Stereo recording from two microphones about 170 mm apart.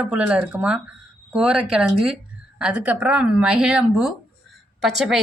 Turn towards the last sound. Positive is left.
turn(degrees=0)  # may be behind; listen again after turning